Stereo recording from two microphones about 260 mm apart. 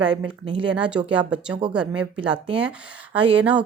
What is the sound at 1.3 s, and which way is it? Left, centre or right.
Speech, centre.